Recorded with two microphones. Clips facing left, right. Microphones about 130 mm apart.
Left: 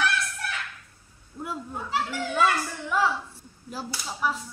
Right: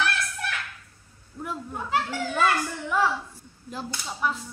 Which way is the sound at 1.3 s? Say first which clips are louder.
Even; 15° left (ahead or behind).